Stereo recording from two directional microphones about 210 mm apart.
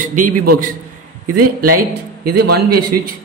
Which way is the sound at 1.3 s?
90° right.